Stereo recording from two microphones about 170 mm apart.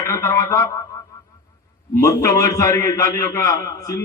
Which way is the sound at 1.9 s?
20° left (ahead or behind).